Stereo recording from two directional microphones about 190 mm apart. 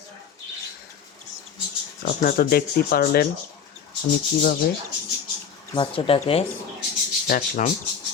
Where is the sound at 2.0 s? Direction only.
50° left (ahead or behind).